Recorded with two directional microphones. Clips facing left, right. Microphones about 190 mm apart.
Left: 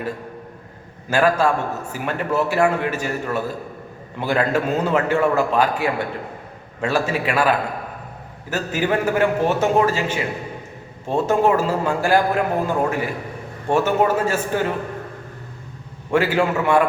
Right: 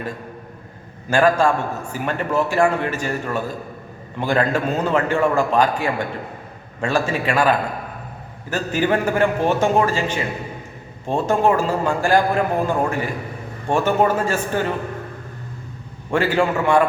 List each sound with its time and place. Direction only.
1.1 s a man's voice: 5° left (ahead or behind)
16.1 s a man's voice: 5° left (ahead or behind)